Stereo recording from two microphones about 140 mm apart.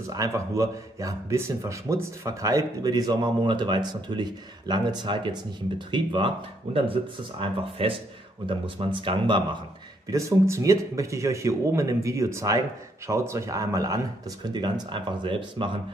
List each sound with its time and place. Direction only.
0.0 s speech: 25° right (ahead or behind)
10.1 s speech: 20° right (ahead or behind); by 15.8 s 40° right (ahead or behind)